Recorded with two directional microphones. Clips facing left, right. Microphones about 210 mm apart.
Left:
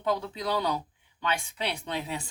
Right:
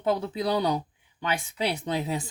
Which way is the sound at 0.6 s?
20° right (ahead or behind).